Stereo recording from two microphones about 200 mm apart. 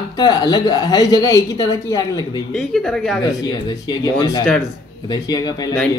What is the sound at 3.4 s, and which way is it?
A woman's voice, 20° left (ahead or behind).